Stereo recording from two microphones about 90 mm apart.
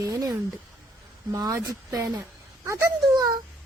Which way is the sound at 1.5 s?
40° right (ahead or behind).